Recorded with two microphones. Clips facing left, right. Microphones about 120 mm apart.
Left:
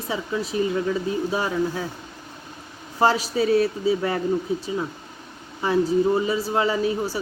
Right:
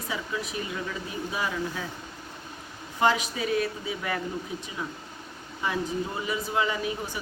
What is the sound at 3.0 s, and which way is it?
Speech, 35° left (ahead or behind).